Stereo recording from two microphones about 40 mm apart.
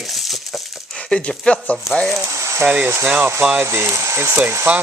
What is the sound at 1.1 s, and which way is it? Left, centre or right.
Speech, left.